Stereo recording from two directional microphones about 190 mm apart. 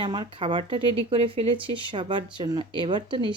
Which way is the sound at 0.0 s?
25° right (ahead or behind).